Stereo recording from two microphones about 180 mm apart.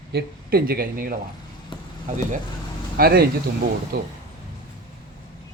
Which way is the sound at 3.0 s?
60° right (ahead or behind).